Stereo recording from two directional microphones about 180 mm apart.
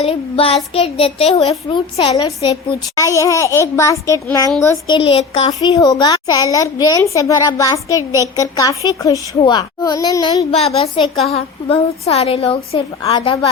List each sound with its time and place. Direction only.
0.0 s a child's voice: 30° left (ahead or behind)
4.9 s a child's voice: 30° left (ahead or behind)
5.5 s a woman's voice: 20° left (ahead or behind)
10.5 s a child's voice: 35° left (ahead or behind)